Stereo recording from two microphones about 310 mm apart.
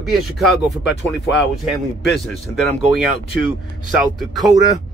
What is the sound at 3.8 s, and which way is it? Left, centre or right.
Speech, centre.